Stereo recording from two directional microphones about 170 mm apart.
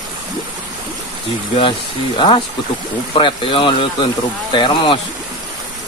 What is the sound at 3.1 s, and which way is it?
Speech, 30° left (ahead or behind).